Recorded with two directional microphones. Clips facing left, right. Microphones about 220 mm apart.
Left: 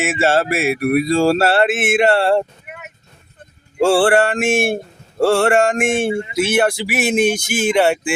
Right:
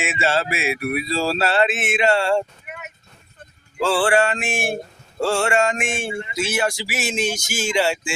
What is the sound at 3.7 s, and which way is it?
Speech, 55° left (ahead or behind).